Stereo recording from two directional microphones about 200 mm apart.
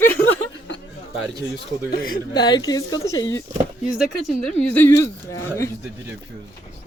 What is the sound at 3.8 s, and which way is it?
A woman's voice, 5° right (ahead or behind).